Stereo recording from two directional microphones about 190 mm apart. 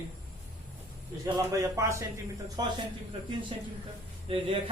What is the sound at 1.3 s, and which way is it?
A man's voice, 15° right (ahead or behind).